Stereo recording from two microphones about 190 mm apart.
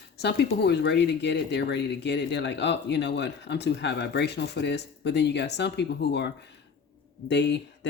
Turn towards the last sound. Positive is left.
turn(degrees=65)  # may be behind; listen again after turning